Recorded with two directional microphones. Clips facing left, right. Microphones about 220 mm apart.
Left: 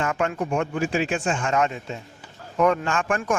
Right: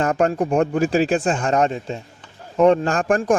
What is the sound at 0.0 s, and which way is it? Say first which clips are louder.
Speech: right 6 dB; 40° right (ahead or behind).